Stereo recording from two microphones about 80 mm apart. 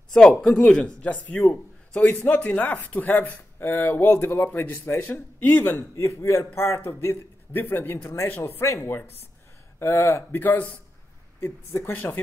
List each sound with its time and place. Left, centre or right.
0.1 s a man's voice: centre; by 12.2 s left